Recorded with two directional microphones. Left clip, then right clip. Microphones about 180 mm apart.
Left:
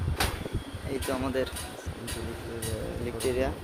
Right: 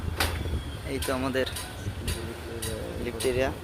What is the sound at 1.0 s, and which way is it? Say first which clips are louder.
Speech: right 2 dB; centre (ahead or behind).